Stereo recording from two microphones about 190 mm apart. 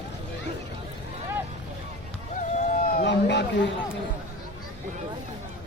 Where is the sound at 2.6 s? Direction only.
45° left (ahead or behind); by 3.4 s 65° left (ahead or behind).